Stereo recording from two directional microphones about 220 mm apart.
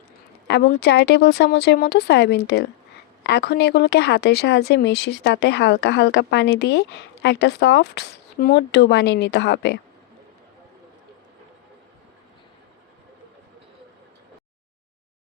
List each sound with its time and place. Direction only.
0.4 s speech: 50° left (ahead or behind)